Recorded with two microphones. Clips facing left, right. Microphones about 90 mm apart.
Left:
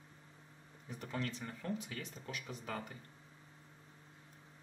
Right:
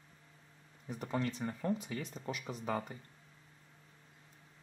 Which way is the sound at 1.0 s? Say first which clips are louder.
Right 5 dB; 25° right (ahead or behind).